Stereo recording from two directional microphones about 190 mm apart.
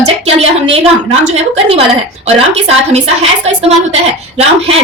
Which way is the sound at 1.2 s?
35° right (ahead or behind).